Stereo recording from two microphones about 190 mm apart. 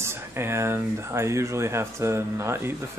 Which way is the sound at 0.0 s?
15° right (ahead or behind).